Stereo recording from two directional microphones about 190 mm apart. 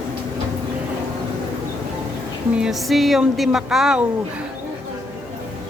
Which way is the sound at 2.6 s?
Centre (ahead or behind).